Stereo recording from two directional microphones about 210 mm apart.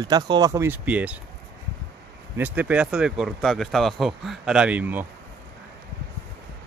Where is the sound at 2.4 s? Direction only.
5° right (ahead or behind).